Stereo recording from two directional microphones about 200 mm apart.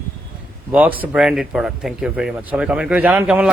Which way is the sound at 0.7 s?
10° right (ahead or behind).